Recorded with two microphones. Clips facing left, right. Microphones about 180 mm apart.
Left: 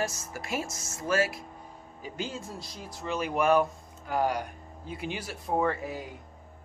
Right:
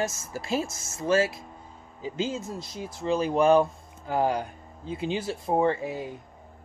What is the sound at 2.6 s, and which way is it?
Speech, 25° right (ahead or behind).